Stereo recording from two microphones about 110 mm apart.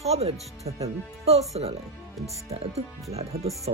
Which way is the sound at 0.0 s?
75° right (ahead or behind).